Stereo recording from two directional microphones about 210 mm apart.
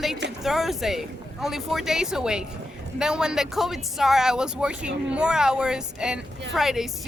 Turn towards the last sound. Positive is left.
turn(degrees=0)  # may be behind; listen again after turning